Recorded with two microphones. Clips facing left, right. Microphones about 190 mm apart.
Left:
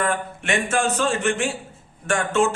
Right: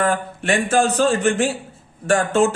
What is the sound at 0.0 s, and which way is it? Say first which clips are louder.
A man's voice: right 4 dB; 35° right (ahead or behind).